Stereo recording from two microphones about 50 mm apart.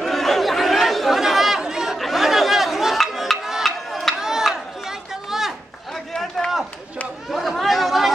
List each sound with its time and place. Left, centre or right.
0.0 s chatter: centre
4.2 s chop: centre
7.2 s chatter: centre